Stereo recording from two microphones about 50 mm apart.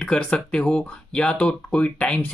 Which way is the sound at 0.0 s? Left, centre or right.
Centre.